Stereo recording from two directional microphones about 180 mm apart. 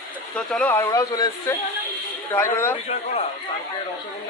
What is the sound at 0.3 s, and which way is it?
Speech, 5° left (ahead or behind).